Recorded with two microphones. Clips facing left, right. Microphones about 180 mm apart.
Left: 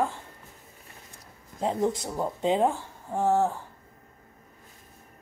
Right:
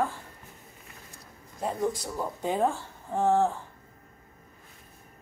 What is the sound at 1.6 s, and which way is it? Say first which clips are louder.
Speech: left 3 dB; 20° left (ahead or behind).